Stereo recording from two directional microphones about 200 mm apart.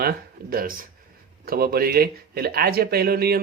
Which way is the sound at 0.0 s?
50° right (ahead or behind).